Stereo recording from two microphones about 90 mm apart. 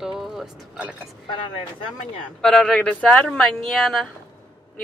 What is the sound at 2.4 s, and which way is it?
Speech, 5° left (ahead or behind).